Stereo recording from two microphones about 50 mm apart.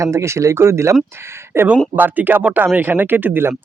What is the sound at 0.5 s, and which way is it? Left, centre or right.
Speech, right.